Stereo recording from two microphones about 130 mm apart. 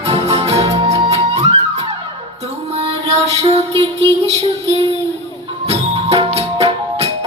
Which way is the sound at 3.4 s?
55° right (ahead or behind).